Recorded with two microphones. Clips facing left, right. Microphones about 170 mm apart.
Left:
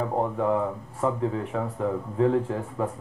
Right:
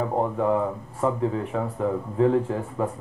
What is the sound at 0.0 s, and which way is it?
Speech, 25° right (ahead or behind).